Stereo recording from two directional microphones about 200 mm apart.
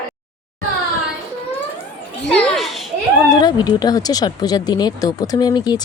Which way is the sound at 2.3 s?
Centre (ahead or behind).